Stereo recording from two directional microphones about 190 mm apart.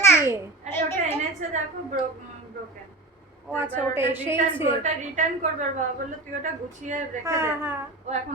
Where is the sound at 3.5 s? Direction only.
10° right (ahead or behind).